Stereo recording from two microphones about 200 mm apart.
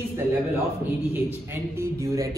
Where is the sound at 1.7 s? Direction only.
15° right (ahead or behind).